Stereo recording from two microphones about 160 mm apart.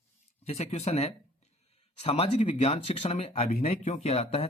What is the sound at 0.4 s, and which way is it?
Speech, 40° left (ahead or behind).